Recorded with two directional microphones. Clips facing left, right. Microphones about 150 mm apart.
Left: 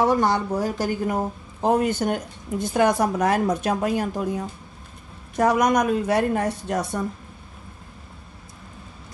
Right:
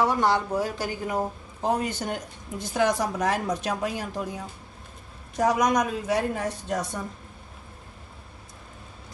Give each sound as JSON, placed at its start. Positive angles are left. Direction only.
{"t": 0.0, "sound": "a woman's voice", "side_deg": 45}
{"t": 5.4, "sound": "speech", "side_deg": 60}